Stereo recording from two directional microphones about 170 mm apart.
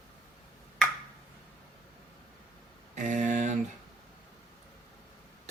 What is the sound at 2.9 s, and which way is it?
Mantra, 45° right (ahead or behind).